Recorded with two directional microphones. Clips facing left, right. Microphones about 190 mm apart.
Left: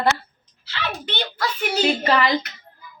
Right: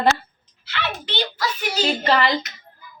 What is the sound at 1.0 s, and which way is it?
Speech, 55° left (ahead or behind).